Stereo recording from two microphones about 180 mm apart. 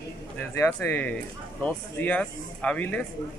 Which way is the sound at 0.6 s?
15° left (ahead or behind).